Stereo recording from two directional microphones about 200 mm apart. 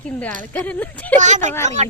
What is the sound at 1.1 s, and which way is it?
Speech, 35° right (ahead or behind).